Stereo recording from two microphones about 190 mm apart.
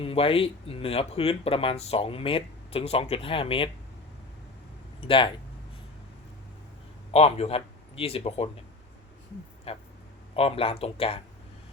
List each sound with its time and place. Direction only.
0.0 s speech: 30° left (ahead or behind)
4.9 s speech: 30° left (ahead or behind)
7.1 s a man's voice: 35° left (ahead or behind)
9.7 s speech: 30° left (ahead or behind)